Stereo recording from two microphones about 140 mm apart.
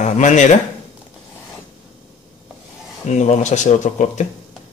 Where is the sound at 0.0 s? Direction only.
60° left (ahead or behind).